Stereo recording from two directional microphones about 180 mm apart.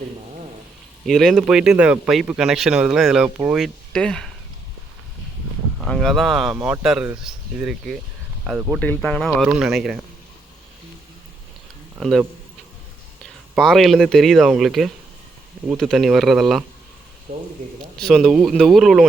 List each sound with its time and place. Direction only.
1.0 s speech: centre (ahead or behind)
3.6 s speech: 5° left (ahead or behind)
5.8 s speech: centre (ahead or behind)
11.9 s speech: centre (ahead or behind)
17.3 s speech: 40° right (ahead or behind)
17.9 s speech: 5° left (ahead or behind)